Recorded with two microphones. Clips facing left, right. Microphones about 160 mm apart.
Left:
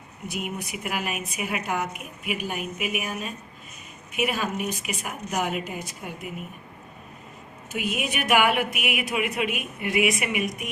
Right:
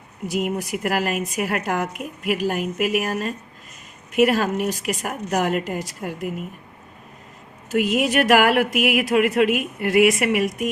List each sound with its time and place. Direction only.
0.3 s a woman's voice: 90° right; by 6.3 s 75° right (ahead or behind)
7.7 s a woman's voice: 90° right